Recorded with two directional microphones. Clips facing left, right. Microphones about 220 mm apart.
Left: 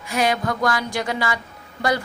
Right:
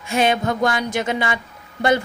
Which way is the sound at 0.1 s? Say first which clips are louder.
Right 3 dB; 25° right (ahead or behind).